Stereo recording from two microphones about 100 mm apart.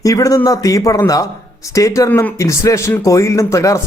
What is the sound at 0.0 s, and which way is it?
A man's voice, 35° left (ahead or behind).